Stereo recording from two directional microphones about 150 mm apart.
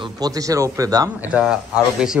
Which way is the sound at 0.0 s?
25° right (ahead or behind).